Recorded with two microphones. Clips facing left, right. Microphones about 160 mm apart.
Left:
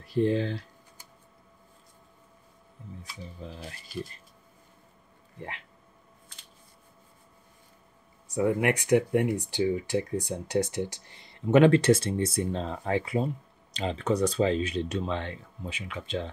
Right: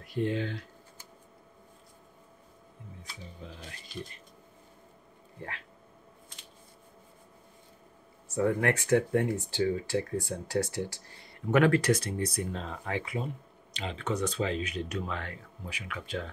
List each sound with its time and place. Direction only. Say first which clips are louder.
0.0 s speech: left 5 dB; 35° left (ahead or behind)
3.4 s speech: left 4 dB; 35° left (ahead or behind)
8.3 s speech: left 2 dB; 15° left (ahead or behind)